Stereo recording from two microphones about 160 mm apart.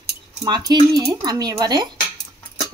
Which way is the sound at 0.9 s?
25° right (ahead or behind).